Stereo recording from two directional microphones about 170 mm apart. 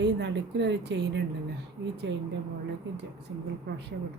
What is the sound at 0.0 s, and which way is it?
Speech, 90° right.